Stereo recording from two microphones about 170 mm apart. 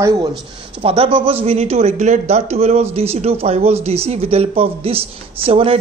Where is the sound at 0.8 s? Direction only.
35° right (ahead or behind).